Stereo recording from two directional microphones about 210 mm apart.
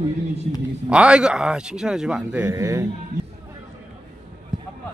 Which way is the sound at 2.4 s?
15° right (ahead or behind).